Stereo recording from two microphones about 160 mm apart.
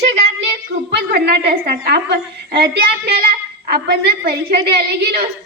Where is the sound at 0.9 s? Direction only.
80° right.